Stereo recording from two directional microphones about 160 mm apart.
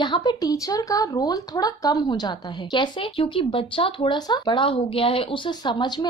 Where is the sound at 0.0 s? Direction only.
25° left (ahead or behind).